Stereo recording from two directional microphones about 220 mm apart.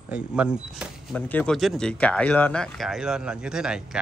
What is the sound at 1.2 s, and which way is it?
Speech, 5° left (ahead or behind).